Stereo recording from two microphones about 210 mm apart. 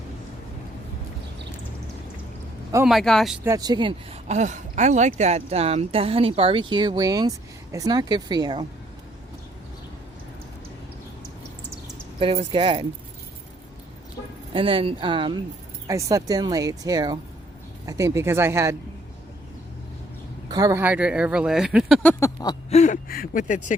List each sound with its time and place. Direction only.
2.8 s speech: centre (ahead or behind)
3.4 s speech: 15° right (ahead or behind)
12.2 s speech: 30° right (ahead or behind)
14.5 s speech: 25° right (ahead or behind)
20.5 s speech: 15° right (ahead or behind)
22.2 s a sound: 15° left (ahead or behind)
22.7 s speech: 35° left (ahead or behind)